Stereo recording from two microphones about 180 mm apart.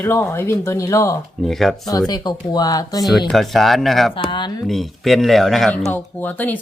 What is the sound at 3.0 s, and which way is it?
Speech, centre (ahead or behind).